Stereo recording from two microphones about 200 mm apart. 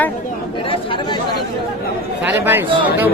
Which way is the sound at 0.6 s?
25° left (ahead or behind).